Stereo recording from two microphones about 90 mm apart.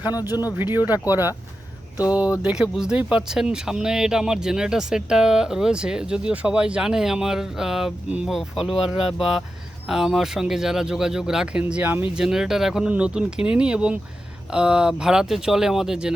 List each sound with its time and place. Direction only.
0.6 s speech: 20° right (ahead or behind)
2.1 s speech: 10° right (ahead or behind)
12.1 s speech: 5° right (ahead or behind)